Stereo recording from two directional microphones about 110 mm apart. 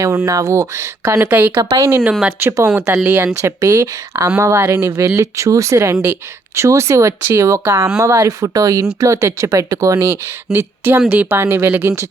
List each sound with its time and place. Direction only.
0.0 s speech: 30° right (ahead or behind)
1.5 s speech: 30° right (ahead or behind)
2.0 s speech: 10° right (ahead or behind)
2.4 s speech: 25° right (ahead or behind)
3.4 s speech: 30° right (ahead or behind)
10.5 s speech: 20° right (ahead or behind)